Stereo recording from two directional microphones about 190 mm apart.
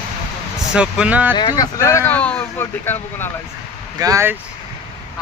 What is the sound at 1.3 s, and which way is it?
Speech, 25° left (ahead or behind).